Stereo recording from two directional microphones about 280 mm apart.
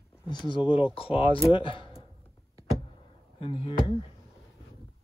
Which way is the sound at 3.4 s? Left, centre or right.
Centre.